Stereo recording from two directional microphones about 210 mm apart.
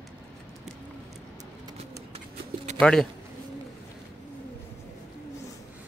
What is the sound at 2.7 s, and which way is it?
Speech, 5° left (ahead or behind).